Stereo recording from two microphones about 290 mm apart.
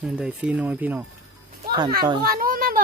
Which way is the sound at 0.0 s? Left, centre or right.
Centre.